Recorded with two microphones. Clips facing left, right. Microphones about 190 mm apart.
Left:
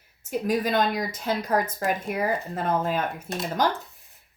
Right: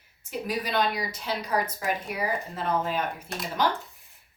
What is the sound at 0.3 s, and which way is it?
Speech, 45° left (ahead or behind).